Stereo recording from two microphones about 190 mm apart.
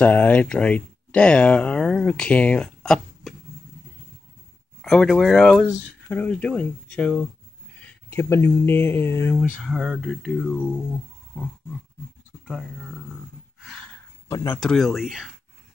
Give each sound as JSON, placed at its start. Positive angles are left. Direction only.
{"t": 0.0, "sound": "speech", "side_deg": 10}
{"t": 4.8, "sound": "speech", "side_deg": 5}
{"t": 9.6, "sound": "speech", "side_deg": 0}
{"t": 14.3, "sound": "speech", "side_deg": 15}
{"t": 14.6, "sound": "speech", "side_deg": 0}